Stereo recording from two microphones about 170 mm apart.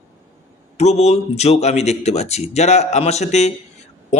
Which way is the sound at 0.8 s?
40° left (ahead or behind).